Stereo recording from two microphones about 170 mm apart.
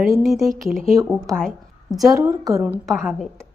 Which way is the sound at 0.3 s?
Centre (ahead or behind).